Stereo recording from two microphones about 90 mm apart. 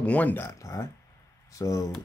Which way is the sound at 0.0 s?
15° left (ahead or behind).